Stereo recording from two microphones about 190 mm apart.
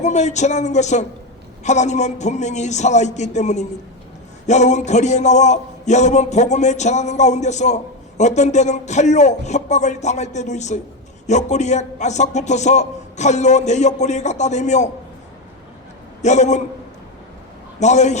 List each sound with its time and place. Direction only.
0.0 s a man's voice: 40° left (ahead or behind)
16.2 s a man's voice: 40° left (ahead or behind)
17.7 s a man's voice: 40° left (ahead or behind)